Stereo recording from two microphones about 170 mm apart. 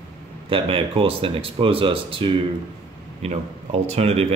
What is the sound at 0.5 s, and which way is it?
Speech, 35° right (ahead or behind).